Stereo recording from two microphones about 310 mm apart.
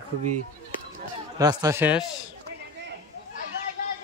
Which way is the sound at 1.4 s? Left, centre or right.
Centre.